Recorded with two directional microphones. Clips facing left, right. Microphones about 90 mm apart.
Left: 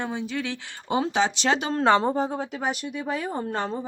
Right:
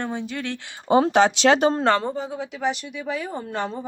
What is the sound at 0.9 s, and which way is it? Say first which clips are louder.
Speech: right 7 dB; 50° right (ahead or behind).